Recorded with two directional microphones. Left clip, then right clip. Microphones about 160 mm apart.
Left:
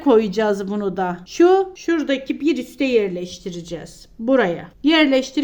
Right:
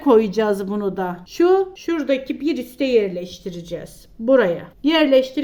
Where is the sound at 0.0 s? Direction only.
5° left (ahead or behind).